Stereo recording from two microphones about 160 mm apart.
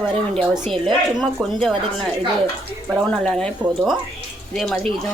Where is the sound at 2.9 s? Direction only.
5° left (ahead or behind).